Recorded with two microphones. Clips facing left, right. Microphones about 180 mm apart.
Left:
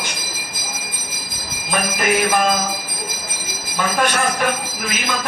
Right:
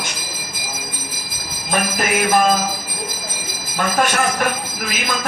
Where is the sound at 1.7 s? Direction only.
45° right (ahead or behind).